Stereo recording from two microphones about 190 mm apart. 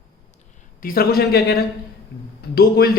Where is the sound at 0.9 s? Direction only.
55° left (ahead or behind).